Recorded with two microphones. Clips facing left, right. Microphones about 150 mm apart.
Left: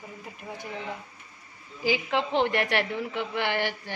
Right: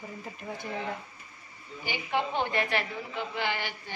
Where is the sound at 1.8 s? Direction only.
90° left; by 3.9 s 70° left (ahead or behind).